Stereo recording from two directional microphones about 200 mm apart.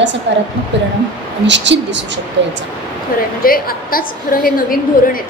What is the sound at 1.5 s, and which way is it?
Speech, 60° right (ahead or behind).